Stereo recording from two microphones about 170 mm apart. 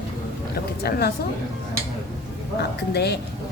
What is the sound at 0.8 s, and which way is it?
Speech, 70° left (ahead or behind).